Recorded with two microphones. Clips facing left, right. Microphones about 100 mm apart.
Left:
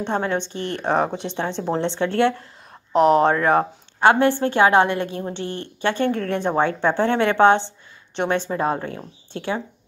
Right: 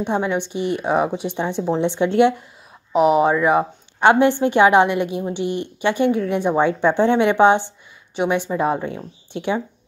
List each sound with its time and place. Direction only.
0.0 s speech: 10° right (ahead or behind)
2.9 s speech: 5° right (ahead or behind)